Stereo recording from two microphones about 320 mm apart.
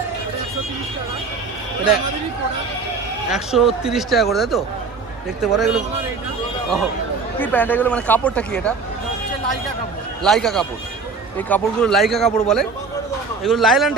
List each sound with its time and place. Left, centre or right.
3.2 s speech: centre
7.3 s speech: centre
10.2 s speech: centre